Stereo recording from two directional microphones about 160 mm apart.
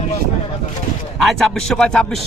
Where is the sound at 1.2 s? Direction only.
Centre (ahead or behind).